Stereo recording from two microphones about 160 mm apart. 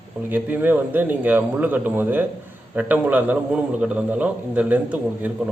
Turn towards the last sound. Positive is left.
turn(degrees=-10)  # may be behind; listen again after turning